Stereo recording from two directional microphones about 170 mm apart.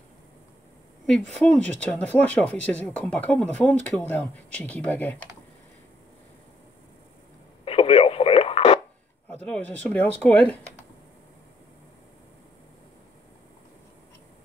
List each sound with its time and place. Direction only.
1.0 s speech: 5° left (ahead or behind)
7.6 s radio: 35° left (ahead or behind)
9.3 s speech: 10° left (ahead or behind)